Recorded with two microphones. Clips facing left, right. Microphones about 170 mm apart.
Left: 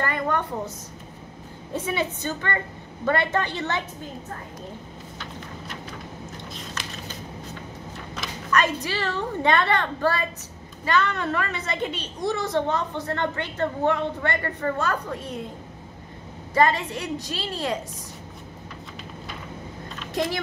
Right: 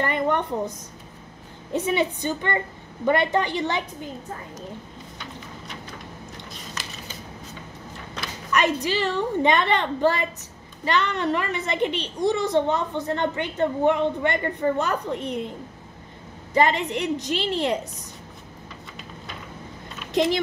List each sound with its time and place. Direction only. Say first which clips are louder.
0.0 s a sound: right 2 dB; 20° right (ahead or behind)
1.7 s a woman's voice: right 4 dB; 20° right (ahead or behind)
8.5 s a woman's voice: right 2 dB; 15° right (ahead or behind)
16.5 s a woman's voice: right 1 dB; 20° right (ahead or behind)